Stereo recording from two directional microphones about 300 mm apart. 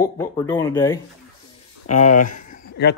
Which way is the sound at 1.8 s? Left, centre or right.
Left.